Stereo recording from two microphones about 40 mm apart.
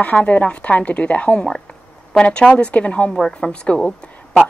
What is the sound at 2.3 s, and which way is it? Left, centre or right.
A woman's voice, left.